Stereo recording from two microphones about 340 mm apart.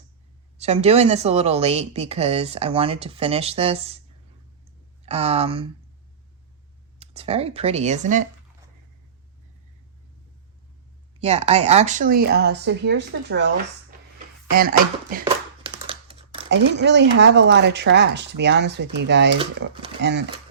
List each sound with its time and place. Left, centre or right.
0.6 s speech: centre
5.0 s speech: centre
7.0 s speech: centre
11.2 s speech: centre
14.5 s speech: right
15.2 s a sound: centre
16.5 s speech: right